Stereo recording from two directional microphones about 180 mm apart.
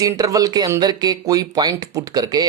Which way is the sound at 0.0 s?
20° right (ahead or behind).